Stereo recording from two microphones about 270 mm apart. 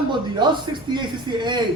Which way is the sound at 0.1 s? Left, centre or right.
Centre.